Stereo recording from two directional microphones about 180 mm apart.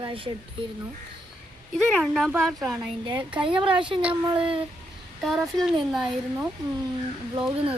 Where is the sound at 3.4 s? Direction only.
30° right (ahead or behind).